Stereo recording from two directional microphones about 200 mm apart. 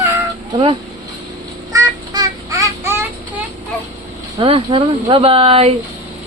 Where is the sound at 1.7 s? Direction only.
15° right (ahead or behind).